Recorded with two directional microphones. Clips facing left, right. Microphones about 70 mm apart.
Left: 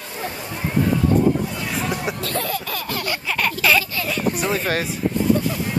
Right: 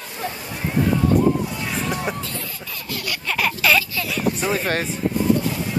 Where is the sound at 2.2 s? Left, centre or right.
Left.